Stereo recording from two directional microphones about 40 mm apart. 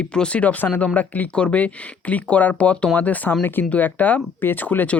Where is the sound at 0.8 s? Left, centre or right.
Left.